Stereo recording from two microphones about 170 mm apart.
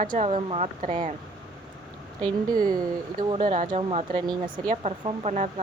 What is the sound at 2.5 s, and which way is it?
Speech, 55° right (ahead or behind).